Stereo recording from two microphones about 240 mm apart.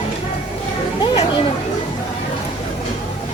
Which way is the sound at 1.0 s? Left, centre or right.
Centre.